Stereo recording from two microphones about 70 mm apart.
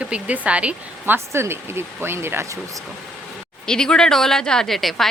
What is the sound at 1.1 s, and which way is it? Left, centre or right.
Speech, right.